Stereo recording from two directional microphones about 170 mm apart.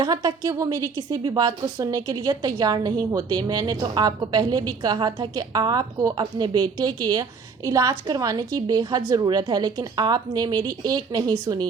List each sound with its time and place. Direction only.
0.0 s a woman's voice: 25° right (ahead or behind)